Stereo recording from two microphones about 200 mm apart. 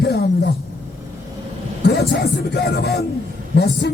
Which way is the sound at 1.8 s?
55° left (ahead or behind).